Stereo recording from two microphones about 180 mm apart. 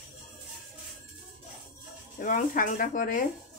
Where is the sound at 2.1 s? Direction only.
45° left (ahead or behind).